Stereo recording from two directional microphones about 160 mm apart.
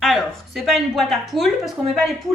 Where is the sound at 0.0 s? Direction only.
Centre (ahead or behind).